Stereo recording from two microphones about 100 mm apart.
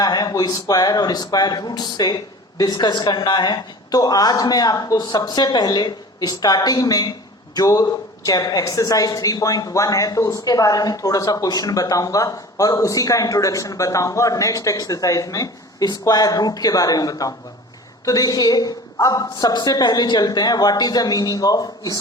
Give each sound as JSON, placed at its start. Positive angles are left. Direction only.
{"t": 0.0, "sound": "a woman's voice", "side_deg": 40}